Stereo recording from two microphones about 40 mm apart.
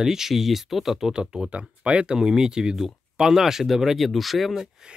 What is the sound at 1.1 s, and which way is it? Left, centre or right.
Speech, centre.